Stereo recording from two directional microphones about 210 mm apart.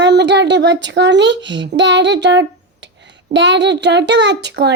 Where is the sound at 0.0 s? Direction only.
55° right (ahead or behind).